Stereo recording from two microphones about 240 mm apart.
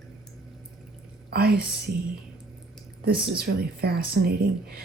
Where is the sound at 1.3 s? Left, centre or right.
Right.